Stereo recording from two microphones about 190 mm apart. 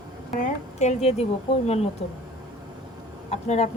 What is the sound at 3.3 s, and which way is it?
Speech, 35° left (ahead or behind).